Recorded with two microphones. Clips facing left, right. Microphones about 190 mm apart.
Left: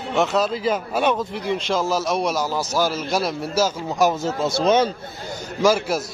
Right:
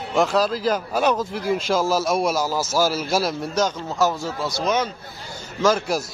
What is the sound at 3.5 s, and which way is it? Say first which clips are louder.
Speech: left 1 dB; 10° left (ahead or behind).